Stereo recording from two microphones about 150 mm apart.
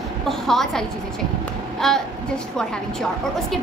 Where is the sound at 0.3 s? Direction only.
Centre (ahead or behind).